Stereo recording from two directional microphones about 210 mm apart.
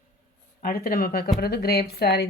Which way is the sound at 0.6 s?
45° left (ahead or behind).